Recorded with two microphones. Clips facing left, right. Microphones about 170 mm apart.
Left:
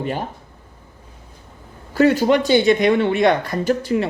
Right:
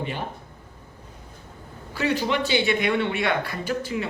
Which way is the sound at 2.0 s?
45° left (ahead or behind).